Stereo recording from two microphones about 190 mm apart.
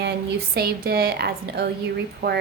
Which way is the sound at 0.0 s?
55° right (ahead or behind).